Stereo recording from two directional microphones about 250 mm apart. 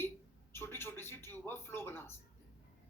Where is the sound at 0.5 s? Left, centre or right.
Centre.